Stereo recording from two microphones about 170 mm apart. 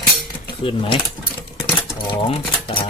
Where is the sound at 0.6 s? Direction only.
30° left (ahead or behind).